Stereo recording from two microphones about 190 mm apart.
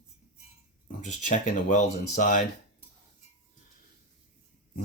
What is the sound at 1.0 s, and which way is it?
Speech, 40° left (ahead or behind).